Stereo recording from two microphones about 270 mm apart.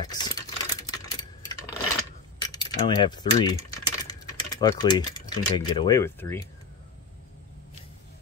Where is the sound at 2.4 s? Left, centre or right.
Centre.